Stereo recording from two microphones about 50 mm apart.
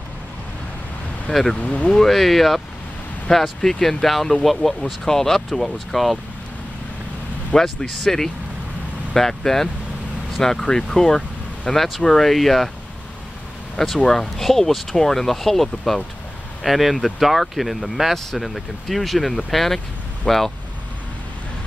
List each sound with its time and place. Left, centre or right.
1.3 s speech: centre
1.6 s speech: left
1.9 s speech: centre
7.5 s speech: centre
13.7 s speech: centre